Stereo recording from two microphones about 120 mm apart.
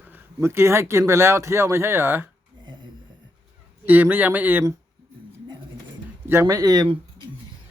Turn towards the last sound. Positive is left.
turn(degrees=-30)  # may be behind; listen again after turning